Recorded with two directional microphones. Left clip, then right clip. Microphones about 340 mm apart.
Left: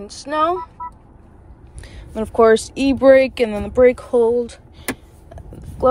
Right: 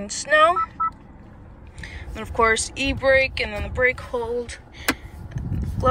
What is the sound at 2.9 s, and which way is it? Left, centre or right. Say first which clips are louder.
Speech: left 7 dB; centre.